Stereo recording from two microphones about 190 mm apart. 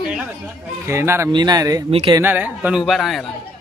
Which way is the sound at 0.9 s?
15° right (ahead or behind).